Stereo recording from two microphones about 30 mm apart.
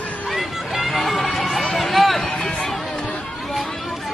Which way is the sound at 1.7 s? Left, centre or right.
Centre.